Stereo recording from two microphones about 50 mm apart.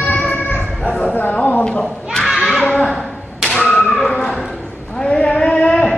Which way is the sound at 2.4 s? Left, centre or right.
Centre.